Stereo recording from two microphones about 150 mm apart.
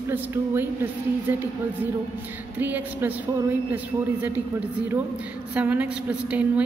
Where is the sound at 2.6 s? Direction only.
10° right (ahead or behind).